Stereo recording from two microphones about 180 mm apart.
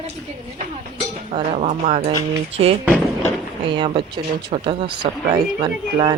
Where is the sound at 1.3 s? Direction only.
40° right (ahead or behind).